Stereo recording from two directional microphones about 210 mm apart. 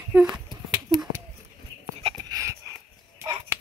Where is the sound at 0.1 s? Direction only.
5° right (ahead or behind).